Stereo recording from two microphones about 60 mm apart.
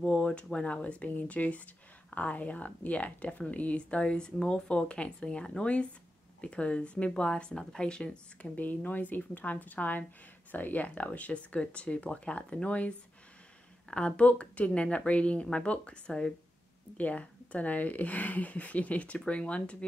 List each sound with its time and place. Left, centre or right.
0.0 s speech: centre